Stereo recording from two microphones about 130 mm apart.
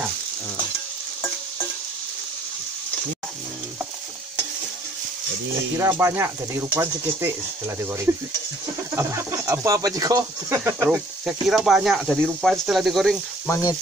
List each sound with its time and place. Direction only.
5.8 s speech: 20° right (ahead or behind)
10.6 s speech: 15° right (ahead or behind)
11.2 s speech: 5° right (ahead or behind)
13.5 s frying: 25° left (ahead or behind)